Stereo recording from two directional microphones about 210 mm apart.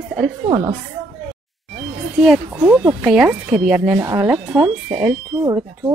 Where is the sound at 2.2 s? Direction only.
Centre (ahead or behind).